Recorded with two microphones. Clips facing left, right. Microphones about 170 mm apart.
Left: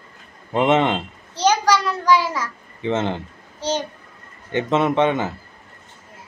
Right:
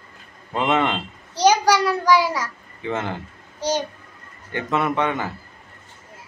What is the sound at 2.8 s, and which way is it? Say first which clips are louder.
Speech: left 4 dB; 25° left (ahead or behind).